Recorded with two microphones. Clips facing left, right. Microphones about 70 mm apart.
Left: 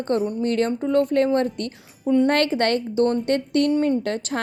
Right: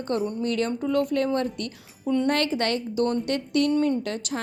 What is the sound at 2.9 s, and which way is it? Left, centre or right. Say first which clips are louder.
A woman's voice: left 4 dB; left.